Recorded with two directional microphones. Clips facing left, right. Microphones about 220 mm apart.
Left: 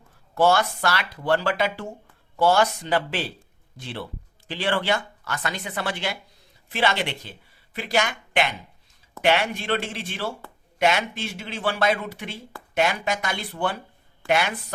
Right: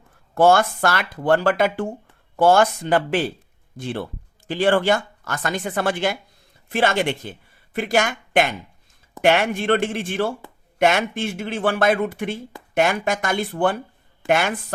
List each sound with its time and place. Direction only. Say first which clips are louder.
0.3 s speech: right 4 dB; 50° right (ahead or behind)